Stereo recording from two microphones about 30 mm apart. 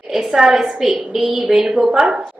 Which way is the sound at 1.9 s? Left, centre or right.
Right.